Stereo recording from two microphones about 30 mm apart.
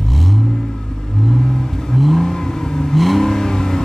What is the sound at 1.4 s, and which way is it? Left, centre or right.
Vehicle, centre.